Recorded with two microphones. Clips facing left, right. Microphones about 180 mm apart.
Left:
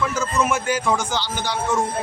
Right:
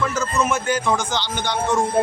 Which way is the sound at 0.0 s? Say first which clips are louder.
Even; 10° left (ahead or behind).